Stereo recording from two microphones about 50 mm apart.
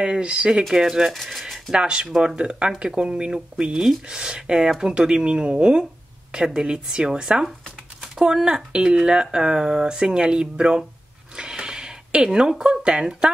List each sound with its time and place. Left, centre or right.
0.0 s speech: centre
0.6 s speech: centre
1.1 s speech: centre
1.4 s speech: centre
11.3 s a sound: centre